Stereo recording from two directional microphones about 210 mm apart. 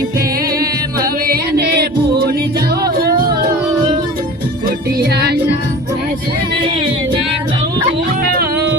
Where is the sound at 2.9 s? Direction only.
45° right (ahead or behind).